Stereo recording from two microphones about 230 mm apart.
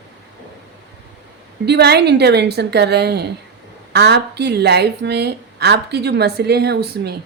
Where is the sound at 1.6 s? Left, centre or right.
Right.